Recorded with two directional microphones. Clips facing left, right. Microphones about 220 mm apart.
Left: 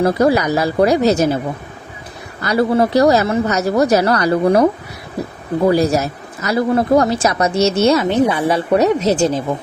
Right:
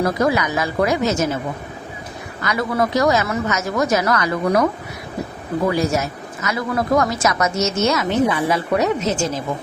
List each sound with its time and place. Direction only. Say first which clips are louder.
0.0 s a woman's voice: left 5 dB; 35° left (ahead or behind)
2.4 s a woman's voice: left 6 dB; 30° left (ahead or behind)